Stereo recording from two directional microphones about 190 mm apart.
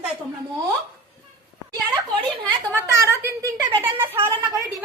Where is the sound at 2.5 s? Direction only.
15° right (ahead or behind).